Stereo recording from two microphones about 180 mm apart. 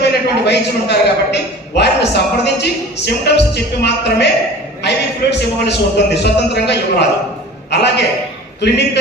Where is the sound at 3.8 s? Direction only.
70° left (ahead or behind).